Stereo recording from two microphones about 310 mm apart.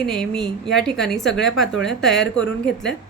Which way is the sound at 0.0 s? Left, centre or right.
Centre.